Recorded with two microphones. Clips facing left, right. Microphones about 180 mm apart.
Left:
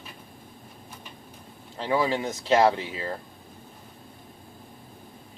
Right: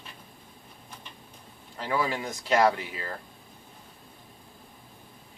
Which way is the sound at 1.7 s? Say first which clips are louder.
Left 4 dB; 25° left (ahead or behind).